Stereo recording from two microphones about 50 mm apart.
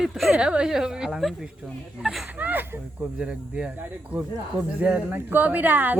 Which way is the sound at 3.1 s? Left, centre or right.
Centre.